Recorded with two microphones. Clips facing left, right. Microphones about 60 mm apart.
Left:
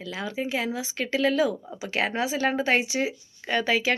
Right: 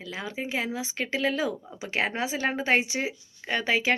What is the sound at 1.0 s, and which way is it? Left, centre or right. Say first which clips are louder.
Speech: left 3 dB; centre.